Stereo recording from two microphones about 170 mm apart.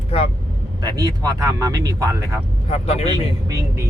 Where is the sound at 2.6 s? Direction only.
35° left (ahead or behind).